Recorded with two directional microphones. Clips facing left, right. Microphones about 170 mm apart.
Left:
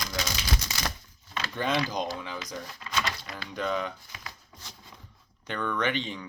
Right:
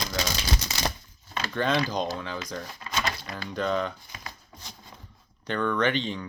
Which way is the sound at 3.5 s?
10° left (ahead or behind).